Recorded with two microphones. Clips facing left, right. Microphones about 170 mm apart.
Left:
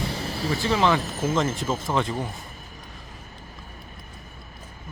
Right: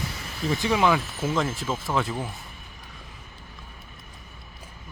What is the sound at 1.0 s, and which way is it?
Speech, 40° left (ahead or behind).